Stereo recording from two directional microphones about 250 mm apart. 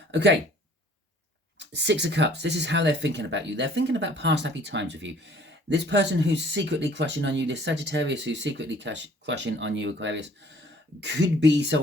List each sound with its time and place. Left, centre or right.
0.1 s speech: right
1.5 s speech: right